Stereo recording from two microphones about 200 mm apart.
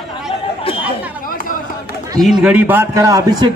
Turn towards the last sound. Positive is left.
turn(degrees=-15)  # may be behind; listen again after turning